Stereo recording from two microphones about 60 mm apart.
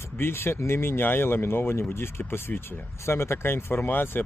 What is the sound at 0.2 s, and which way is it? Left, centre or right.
Speech, left.